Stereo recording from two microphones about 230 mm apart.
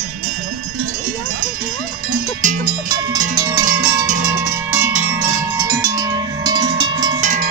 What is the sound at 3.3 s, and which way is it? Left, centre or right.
Cowbell, centre.